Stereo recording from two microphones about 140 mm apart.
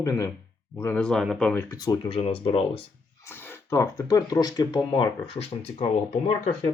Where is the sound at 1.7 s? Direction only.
25° left (ahead or behind).